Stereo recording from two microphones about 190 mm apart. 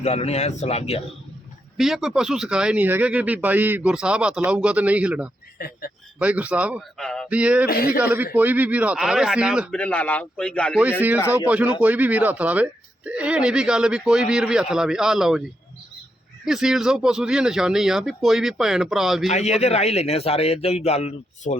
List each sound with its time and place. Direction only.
0.0 s a man's voice: 35° left (ahead or behind)
1.8 s speech: centre (ahead or behind)
5.5 s a man's voice: 55° left (ahead or behind)
6.1 s speech: 5° right (ahead or behind)
9.7 s a man's voice: 5° left (ahead or behind)
11.3 s speech: 5° right (ahead or behind)
16.5 s speech: centre (ahead or behind)
19.3 s a man's voice: 35° left (ahead or behind)